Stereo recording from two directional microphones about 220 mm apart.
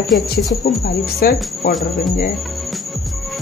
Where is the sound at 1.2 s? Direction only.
40° left (ahead or behind).